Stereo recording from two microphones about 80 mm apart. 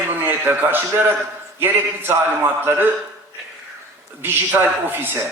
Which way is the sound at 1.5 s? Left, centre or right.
Right.